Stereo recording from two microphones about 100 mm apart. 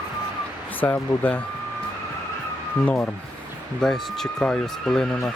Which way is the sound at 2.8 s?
15° left (ahead or behind).